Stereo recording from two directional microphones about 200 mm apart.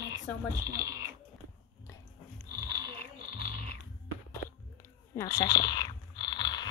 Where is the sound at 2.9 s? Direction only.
30° right (ahead or behind).